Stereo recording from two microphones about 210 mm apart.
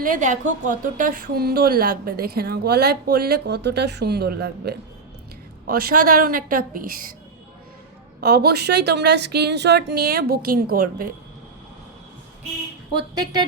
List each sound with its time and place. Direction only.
0.0 s a woman's voice: 40° right (ahead or behind)
8.2 s a woman's voice: 50° right (ahead or behind)